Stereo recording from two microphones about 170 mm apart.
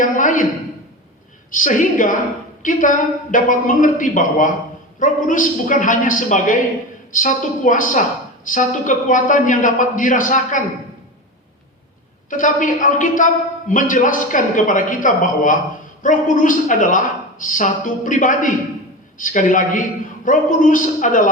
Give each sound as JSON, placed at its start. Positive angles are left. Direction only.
{"t": 0.0, "sound": "a sound", "side_deg": 50}
{"t": 1.5, "sound": "a woman's voice", "side_deg": 50}
{"t": 12.3, "sound": "a woman's voice", "side_deg": 50}